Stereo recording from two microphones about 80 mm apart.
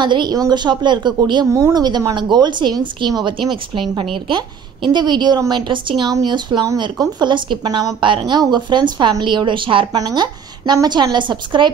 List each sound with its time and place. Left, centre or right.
0.0 s a woman's voice: right
1.5 s a woman's voice: right
5.5 s a woman's voice: right
8.0 s a woman's voice: right
9.2 s a woman's voice: right
9.9 s a woman's voice: right